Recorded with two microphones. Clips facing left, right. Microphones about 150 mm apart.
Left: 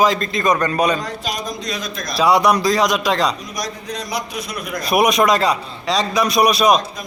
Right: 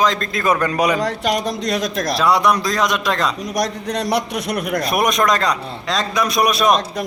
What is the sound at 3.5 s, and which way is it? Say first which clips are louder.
A man's voice: right 6 dB; 70° right (ahead or behind).